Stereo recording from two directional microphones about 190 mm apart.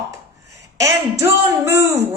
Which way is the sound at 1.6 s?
15° right (ahead or behind).